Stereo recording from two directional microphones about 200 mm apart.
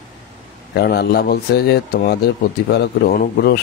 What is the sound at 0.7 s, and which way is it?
Speech, 55° left (ahead or behind).